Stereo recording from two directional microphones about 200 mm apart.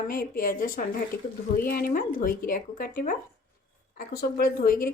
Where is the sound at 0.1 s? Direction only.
45° left (ahead or behind).